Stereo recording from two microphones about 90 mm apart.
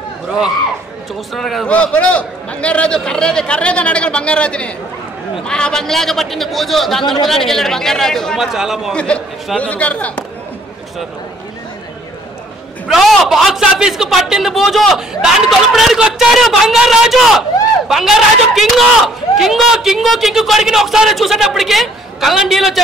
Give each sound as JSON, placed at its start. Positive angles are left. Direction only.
{"t": 1.3, "sound": "a man's voice", "side_deg": 0}
{"t": 1.7, "sound": "a man's voice", "side_deg": 15}
{"t": 8.9, "sound": "a man's voice", "side_deg": 10}
{"t": 12.8, "sound": "a man's voice", "side_deg": 0}